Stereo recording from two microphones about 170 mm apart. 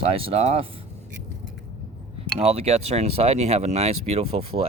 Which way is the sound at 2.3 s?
35° right (ahead or behind).